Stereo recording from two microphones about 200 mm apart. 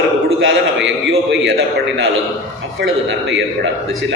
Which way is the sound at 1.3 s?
60° right (ahead or behind).